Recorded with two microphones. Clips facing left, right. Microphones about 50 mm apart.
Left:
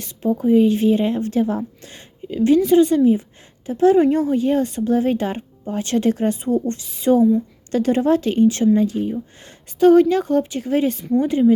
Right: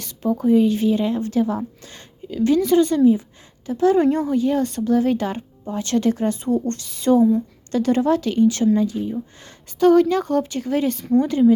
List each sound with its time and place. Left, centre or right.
0.4 s speech: centre
0.7 s a woman's voice: left
8.9 s a woman's voice: left
9.4 s speech: left